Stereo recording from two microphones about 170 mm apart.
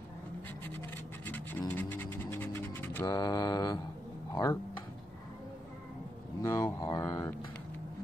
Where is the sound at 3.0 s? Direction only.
20° left (ahead or behind).